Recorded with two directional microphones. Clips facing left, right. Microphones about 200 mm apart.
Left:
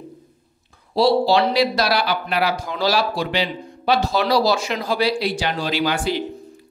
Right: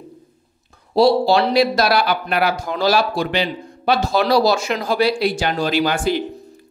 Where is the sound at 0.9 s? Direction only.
45° right (ahead or behind).